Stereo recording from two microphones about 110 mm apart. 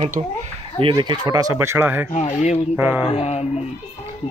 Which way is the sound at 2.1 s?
90° left.